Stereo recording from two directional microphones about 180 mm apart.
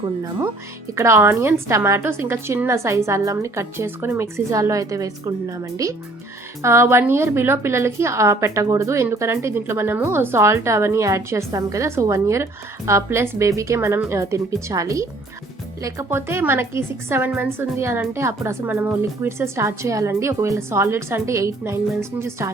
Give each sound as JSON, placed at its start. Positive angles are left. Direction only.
{"t": 0.9, "sound": "a woman's voice", "side_deg": -15}